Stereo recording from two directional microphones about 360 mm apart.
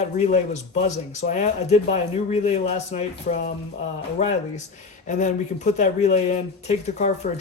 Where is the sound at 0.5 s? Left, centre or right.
Centre.